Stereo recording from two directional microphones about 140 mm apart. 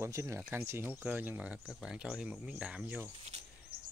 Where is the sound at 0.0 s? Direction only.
20° right (ahead or behind).